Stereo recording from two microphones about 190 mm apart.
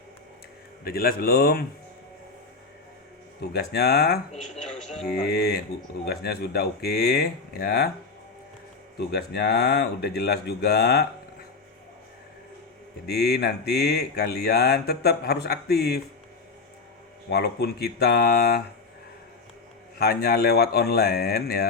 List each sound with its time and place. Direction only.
0.9 s speech: 50° left (ahead or behind)
3.4 s speech: 60° left (ahead or behind)
9.0 s speech: 60° left (ahead or behind)
13.1 s speech: 55° left (ahead or behind)
17.2 s speech: 60° left (ahead or behind)
20.0 s speech: 55° left (ahead or behind)